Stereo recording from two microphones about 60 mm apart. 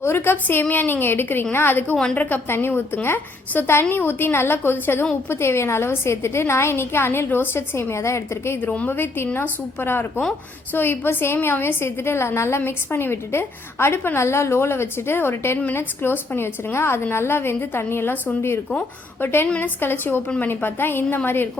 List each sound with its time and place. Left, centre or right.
0.0 s a woman's voice: left
8.6 s a woman's voice: left
8.9 s a woman's voice: left
19.2 s a woman's voice: left
20.2 s a woman's voice: left
20.5 s a woman's voice: left